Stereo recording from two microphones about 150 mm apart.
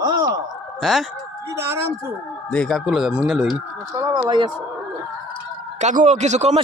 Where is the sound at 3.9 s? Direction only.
20° right (ahead or behind).